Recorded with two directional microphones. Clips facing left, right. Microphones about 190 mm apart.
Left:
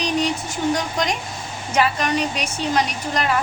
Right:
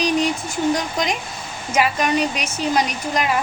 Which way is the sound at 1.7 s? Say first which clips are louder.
Right 1 dB; 10° right (ahead or behind).